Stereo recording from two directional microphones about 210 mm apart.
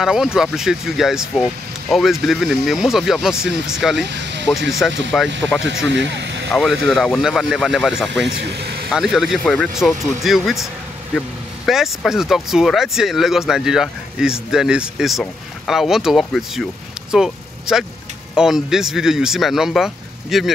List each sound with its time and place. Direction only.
0.0 s speech: centre (ahead or behind)
4.0 s speech: 55° right (ahead or behind)
4.8 s speech: centre (ahead or behind)
5.9 s speech: 55° right (ahead or behind)
6.5 s speech: centre (ahead or behind)
8.3 s speech: 55° right (ahead or behind)
8.9 s speech: 5° right (ahead or behind)